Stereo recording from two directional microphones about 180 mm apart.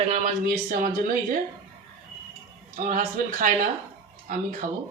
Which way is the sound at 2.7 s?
45° right (ahead or behind).